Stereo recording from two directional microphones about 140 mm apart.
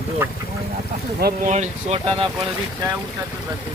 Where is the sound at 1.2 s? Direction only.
90° right.